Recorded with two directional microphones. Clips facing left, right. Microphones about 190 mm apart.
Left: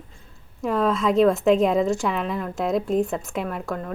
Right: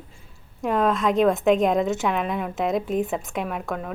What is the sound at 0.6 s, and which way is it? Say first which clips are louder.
A woman's voice: even; centre (ahead or behind).